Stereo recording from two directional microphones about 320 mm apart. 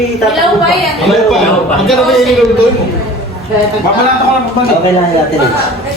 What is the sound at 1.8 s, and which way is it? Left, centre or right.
Speech, centre.